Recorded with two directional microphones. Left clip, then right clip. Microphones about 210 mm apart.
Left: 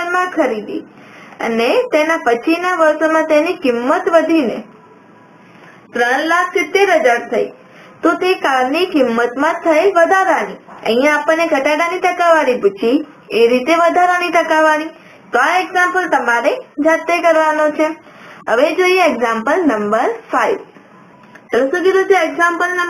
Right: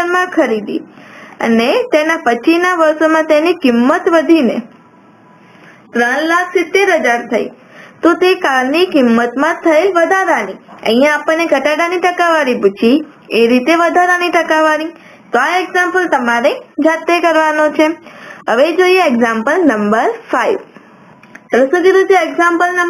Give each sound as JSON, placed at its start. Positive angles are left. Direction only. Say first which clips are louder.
{"t": 0.0, "sound": "a sound", "louder": "right 3 dB", "side_deg": -40}
{"t": 1.4, "sound": "a woman's voice", "louder": "right 2 dB", "side_deg": -35}
{"t": 5.9, "sound": "a woman's voice", "louder": "right 1 dB", "side_deg": -35}
{"t": 21.5, "sound": "a woman's voice", "louder": "right 4 dB", "side_deg": -40}